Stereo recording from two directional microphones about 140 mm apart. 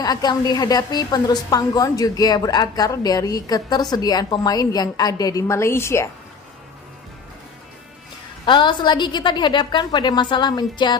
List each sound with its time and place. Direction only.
0.0 s a woman's voice: 30° left (ahead or behind)
8.4 s a woman's voice: 35° left (ahead or behind)